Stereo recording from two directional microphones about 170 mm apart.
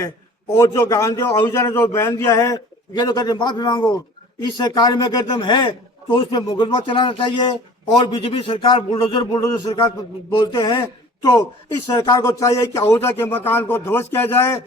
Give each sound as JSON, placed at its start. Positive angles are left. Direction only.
{"t": 0.5, "sound": "a man's voice", "side_deg": 20}
{"t": 11.9, "sound": "a man's voice", "side_deg": 20}